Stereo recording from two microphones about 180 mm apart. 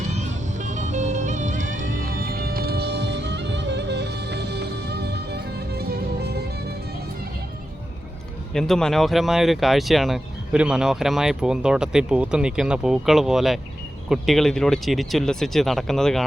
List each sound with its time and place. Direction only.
0.1 s music: 40° right (ahead or behind); by 6.7 s 60° right (ahead or behind)
8.5 s speech: centre (ahead or behind)